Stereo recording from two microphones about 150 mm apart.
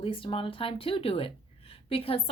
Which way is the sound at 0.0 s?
35° left (ahead or behind).